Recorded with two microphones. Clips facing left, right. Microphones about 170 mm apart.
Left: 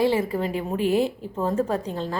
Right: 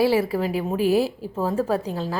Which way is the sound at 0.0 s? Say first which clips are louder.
Right 2 dB; 10° right (ahead or behind).